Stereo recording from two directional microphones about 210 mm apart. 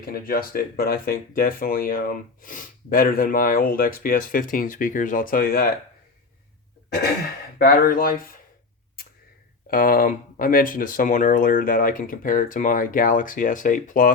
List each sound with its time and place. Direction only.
0.0 s speech: 45° left (ahead or behind)
7.6 s speech: 45° left (ahead or behind)
9.6 s speech: 40° left (ahead or behind)